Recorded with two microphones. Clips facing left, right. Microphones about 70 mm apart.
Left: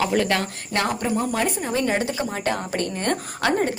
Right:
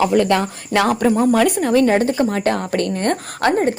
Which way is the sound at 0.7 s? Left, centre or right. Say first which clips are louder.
Right 8 dB; right.